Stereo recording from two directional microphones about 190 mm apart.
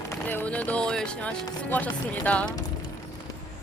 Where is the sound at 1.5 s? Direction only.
10° left (ahead or behind).